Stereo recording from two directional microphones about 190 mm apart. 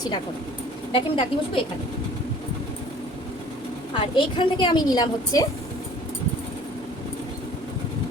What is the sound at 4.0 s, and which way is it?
A woman's voice, 25° left (ahead or behind).